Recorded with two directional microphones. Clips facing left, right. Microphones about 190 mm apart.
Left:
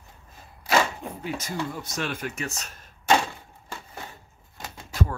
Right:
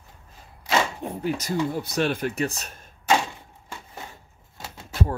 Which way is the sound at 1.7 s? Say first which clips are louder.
Right 7 dB; 35° right (ahead or behind).